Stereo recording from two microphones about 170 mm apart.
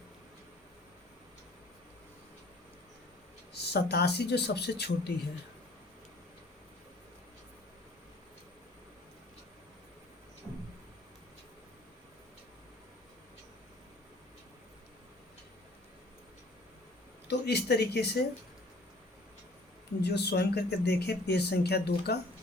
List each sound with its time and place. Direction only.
3.5 s speech: 75° left (ahead or behind)
17.2 s a sound: 75° left (ahead or behind)
20.0 s speech: 75° left (ahead or behind)